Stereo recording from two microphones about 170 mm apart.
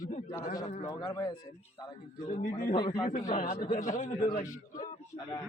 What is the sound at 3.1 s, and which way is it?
A man's voice, 50° left (ahead or behind).